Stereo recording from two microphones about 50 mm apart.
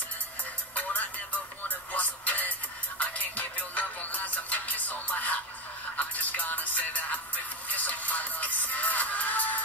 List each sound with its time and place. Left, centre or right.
0.7 s music: left